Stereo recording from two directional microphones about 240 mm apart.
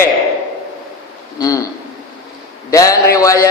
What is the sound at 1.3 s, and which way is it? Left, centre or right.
Speech, centre.